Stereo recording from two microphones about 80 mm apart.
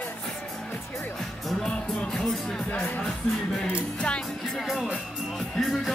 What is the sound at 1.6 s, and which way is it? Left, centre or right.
Music, centre.